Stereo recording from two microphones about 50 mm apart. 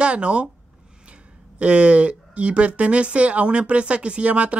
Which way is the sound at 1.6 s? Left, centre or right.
Right.